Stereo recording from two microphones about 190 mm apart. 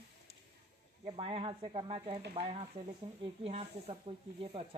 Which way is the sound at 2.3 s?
30° right (ahead or behind).